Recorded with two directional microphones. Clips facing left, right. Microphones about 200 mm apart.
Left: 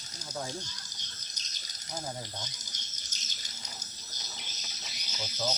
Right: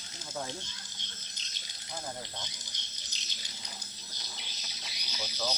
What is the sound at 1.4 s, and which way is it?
Rattle, 40° left (ahead or behind).